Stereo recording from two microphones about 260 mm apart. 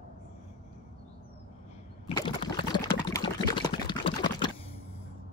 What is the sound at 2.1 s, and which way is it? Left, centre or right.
Liquid, centre.